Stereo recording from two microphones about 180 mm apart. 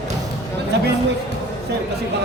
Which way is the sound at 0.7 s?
65° right (ahead or behind).